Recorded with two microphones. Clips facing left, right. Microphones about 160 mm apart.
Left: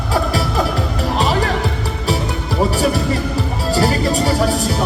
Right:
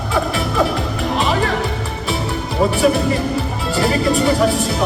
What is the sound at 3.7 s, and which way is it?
Music, 40° left (ahead or behind).